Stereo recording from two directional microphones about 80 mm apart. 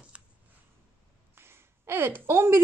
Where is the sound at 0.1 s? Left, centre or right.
Centre.